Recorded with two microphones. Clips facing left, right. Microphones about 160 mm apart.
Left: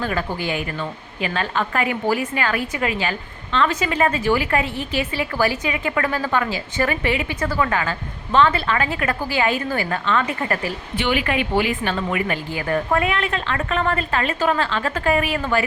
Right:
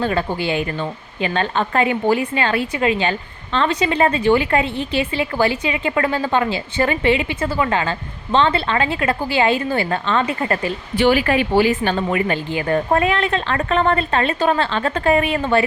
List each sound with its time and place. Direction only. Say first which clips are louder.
0.0 s a woman's voice: right 4 dB; 30° right (ahead or behind)
10.9 s speech: right 6 dB; 35° right (ahead or behind)